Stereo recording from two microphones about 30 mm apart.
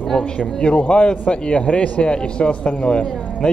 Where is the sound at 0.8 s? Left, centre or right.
Left.